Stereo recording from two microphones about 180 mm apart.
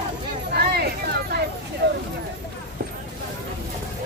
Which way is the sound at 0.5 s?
60° right (ahead or behind).